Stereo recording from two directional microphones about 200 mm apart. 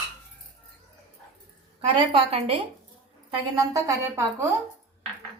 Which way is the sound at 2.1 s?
30° right (ahead or behind).